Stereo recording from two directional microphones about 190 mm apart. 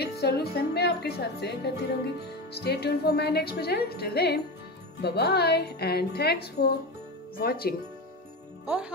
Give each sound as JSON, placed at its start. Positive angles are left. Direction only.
{"t": 0.0, "sound": "speech", "side_deg": 55}